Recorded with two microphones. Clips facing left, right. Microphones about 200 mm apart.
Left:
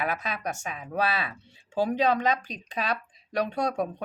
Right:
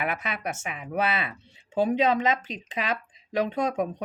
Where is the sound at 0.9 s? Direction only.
20° right (ahead or behind).